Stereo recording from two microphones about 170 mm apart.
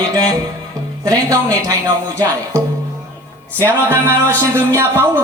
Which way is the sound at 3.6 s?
15° right (ahead or behind).